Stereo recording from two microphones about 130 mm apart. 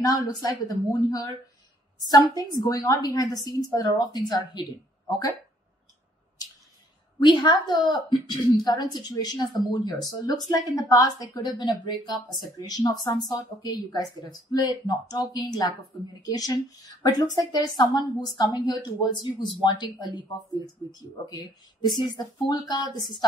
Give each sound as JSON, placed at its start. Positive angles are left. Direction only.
{"t": 0.0, "sound": "speech", "side_deg": 30}
{"t": 3.3, "sound": "a woman's voice", "side_deg": -30}
{"t": 3.7, "sound": "a woman's voice", "side_deg": 30}
{"t": 7.2, "sound": "a woman's voice", "side_deg": 35}